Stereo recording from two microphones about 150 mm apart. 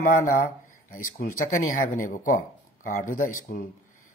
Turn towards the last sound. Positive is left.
turn(degrees=65)  # may be behind; listen again after turning